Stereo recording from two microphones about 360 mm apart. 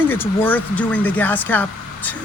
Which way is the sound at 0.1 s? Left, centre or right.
Centre.